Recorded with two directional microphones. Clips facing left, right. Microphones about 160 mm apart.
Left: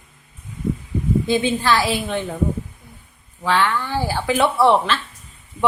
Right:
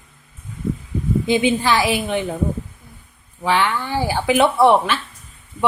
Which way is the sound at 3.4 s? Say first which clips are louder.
Even; 15° right (ahead or behind).